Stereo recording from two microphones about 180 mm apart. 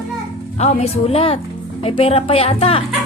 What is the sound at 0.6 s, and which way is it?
A woman's voice, 35° left (ahead or behind).